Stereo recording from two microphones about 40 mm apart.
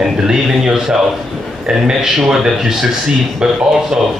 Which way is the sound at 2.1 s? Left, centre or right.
Centre.